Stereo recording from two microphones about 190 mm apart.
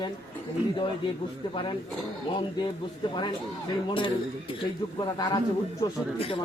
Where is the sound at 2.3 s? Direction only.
25° left (ahead or behind).